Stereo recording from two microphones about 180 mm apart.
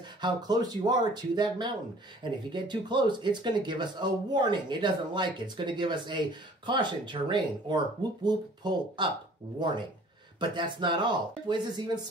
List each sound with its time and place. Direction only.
0.2 s speech: 20° right (ahead or behind)
10.4 s speech: 25° right (ahead or behind)